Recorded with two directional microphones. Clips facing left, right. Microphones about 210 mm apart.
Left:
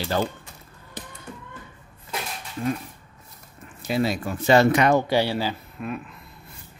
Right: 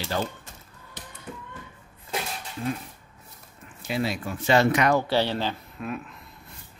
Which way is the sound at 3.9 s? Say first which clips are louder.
Left 4 dB; 40° left (ahead or behind).